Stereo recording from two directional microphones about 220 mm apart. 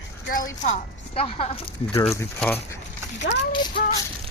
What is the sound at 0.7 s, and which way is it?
Speech, 25° left (ahead or behind).